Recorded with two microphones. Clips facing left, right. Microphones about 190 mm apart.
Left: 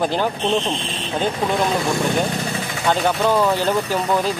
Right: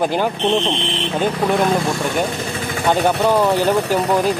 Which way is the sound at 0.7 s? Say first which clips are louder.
Right 5 dB; 70° right (ahead or behind).